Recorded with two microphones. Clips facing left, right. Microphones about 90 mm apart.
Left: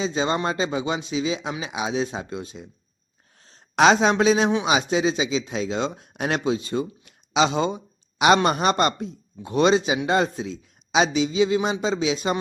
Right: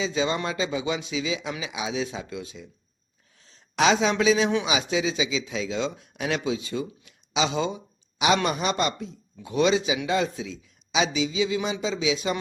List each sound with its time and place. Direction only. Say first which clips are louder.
0.0 s a man's voice: left 2 dB; 40° left (ahead or behind)
7.0 s a sound: left 6 dB; 50° left (ahead or behind)
8.4 s a man's voice: left 5 dB; 50° left (ahead or behind)